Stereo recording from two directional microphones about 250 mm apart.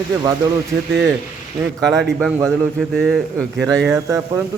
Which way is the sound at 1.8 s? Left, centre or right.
Centre.